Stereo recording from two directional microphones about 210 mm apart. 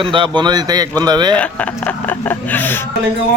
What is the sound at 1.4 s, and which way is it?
Speech, 5° left (ahead or behind).